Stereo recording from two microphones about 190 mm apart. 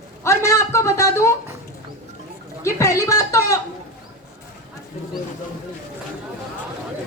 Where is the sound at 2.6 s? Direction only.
15° left (ahead or behind).